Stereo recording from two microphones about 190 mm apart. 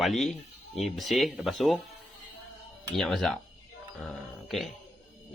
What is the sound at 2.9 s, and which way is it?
Speech, centre (ahead or behind).